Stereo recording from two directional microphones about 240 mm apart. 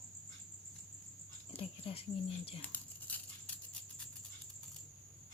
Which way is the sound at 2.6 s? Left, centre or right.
Centre.